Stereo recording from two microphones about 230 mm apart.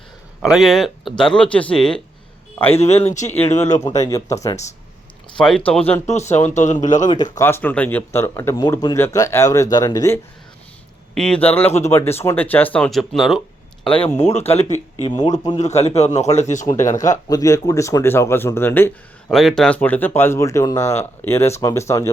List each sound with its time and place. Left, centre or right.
0.4 s speech: centre
2.6 s speech: left
3.8 s speech: centre
5.4 s speech: centre
6.5 s speech: left
7.1 s speech: centre
11.1 s speech: centre
14.2 s speech: left
15.5 s speech: left
16.6 s speech: centre